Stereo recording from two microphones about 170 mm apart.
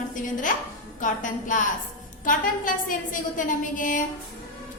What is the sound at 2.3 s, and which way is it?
A woman's voice, 50° left (ahead or behind).